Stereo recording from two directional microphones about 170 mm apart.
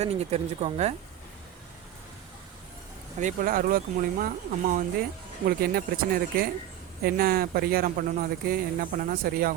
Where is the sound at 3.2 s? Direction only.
55° right (ahead or behind).